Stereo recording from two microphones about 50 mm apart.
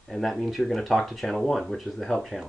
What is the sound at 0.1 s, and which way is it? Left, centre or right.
Speech, centre.